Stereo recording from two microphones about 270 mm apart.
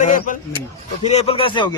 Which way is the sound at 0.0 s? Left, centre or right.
Left.